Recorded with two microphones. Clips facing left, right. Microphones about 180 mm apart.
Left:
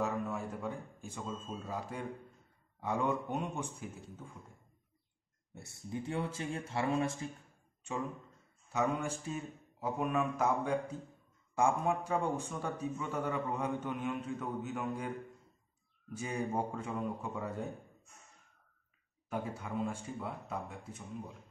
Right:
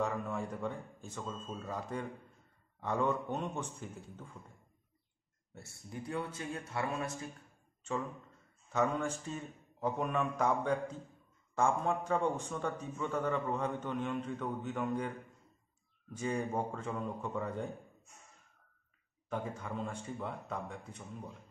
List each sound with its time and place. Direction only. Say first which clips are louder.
0.0 s a man's voice: even; 5° left (ahead or behind)
5.5 s speech: left 6 dB; 20° left (ahead or behind)
8.7 s a man's voice: right 1 dB; 10° left (ahead or behind)
16.1 s a man's voice: right 1 dB; 10° left (ahead or behind)
19.2 s a man's voice: even; 10° left (ahead or behind)